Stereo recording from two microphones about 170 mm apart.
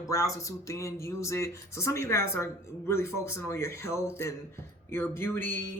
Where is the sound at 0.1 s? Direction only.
20° left (ahead or behind).